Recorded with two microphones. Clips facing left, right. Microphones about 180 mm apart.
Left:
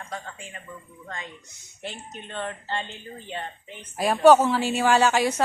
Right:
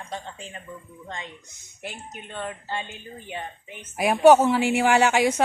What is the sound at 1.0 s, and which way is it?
Speech, 20° right (ahead or behind).